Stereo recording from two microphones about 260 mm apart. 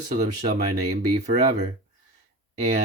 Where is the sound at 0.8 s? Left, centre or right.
Right.